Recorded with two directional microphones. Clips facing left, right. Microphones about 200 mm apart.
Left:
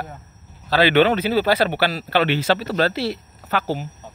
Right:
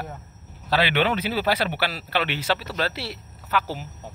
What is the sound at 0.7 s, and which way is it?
Speech, 40° left (ahead or behind).